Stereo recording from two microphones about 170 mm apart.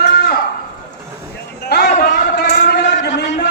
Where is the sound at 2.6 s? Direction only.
85° left.